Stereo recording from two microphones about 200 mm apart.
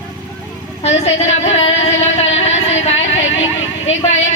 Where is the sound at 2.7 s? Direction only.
35° left (ahead or behind).